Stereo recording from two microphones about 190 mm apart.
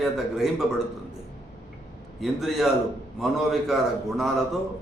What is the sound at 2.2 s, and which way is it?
A man's voice, centre (ahead or behind).